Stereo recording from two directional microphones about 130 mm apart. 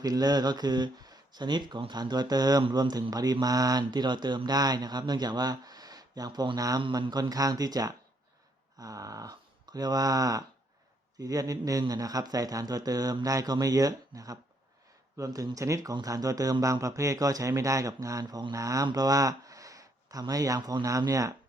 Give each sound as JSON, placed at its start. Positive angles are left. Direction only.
{"t": 0.0, "sound": "speech", "side_deg": -30}